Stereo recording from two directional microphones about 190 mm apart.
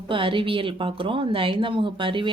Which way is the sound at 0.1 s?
25° right (ahead or behind).